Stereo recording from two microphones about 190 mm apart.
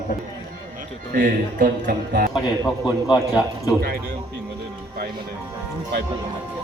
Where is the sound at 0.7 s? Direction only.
45° right (ahead or behind).